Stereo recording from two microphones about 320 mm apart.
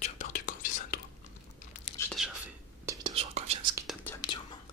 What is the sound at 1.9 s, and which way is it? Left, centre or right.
Whispering, centre.